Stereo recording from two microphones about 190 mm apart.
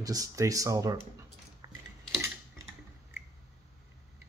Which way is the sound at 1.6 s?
20° right (ahead or behind).